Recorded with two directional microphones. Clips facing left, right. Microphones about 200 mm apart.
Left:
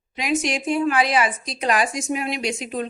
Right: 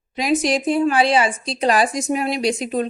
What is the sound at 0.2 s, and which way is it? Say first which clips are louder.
Speech: right 5 dB; 35° right (ahead or behind).